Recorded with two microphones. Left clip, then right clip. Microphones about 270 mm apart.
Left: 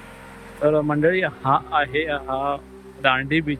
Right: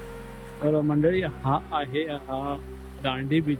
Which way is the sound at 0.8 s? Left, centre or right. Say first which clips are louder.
Left 4 dB; centre.